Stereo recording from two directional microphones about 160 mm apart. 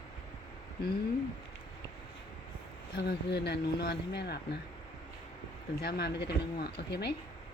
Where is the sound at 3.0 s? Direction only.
90° left.